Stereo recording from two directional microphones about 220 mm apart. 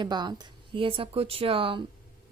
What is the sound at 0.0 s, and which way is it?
A woman's voice, 20° right (ahead or behind).